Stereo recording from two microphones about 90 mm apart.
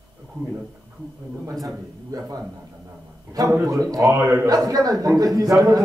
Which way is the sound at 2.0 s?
40° right (ahead or behind).